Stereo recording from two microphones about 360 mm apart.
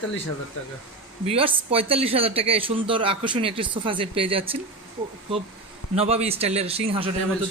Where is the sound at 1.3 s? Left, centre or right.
Centre.